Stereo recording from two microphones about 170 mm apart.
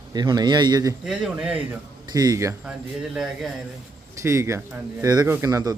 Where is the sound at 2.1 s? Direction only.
20° right (ahead or behind).